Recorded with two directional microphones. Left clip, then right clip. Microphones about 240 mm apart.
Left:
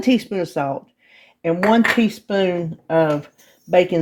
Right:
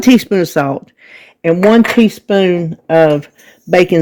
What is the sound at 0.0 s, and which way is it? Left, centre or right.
Speech, right.